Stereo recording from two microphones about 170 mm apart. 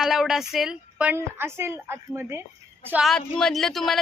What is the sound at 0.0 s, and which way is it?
Speech, centre (ahead or behind).